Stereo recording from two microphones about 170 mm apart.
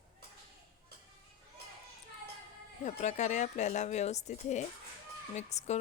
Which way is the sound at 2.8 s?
45° left (ahead or behind).